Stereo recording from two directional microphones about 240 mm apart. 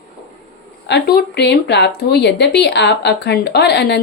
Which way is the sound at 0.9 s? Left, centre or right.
Left.